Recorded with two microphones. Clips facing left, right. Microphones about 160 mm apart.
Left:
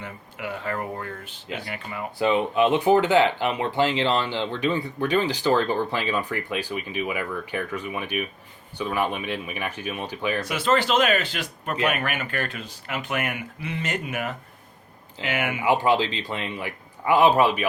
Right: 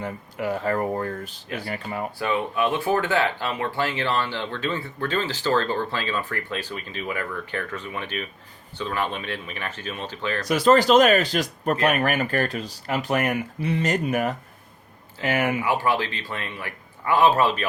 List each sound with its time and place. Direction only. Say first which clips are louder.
0.0 s speech: right 6 dB; 40° right (ahead or behind)
2.1 s speech: left 5 dB; 20° left (ahead or behind)
10.4 s speech: right 8 dB; 40° right (ahead or behind)
15.6 s speech: left 3 dB; 20° left (ahead or behind)